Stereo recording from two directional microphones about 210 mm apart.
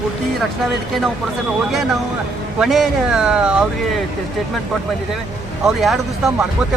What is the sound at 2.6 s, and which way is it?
Speech, centre (ahead or behind).